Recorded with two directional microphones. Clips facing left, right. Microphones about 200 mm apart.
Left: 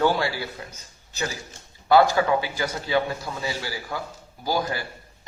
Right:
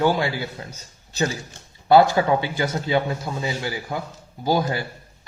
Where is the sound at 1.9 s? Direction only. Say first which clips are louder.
Right 2 dB; 25° right (ahead or behind).